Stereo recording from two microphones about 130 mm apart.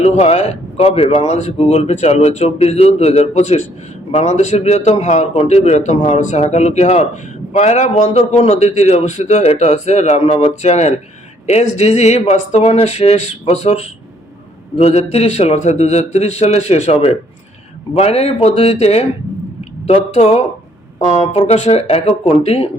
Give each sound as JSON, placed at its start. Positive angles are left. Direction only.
{"t": 0.0, "sound": "speech", "side_deg": 55}